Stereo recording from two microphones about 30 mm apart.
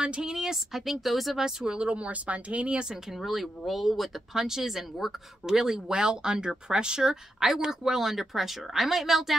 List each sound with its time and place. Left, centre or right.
0.0 s speech: right
0.8 s speech: centre
1.7 s speech: right
3.3 s speech: centre
4.3 s speech: centre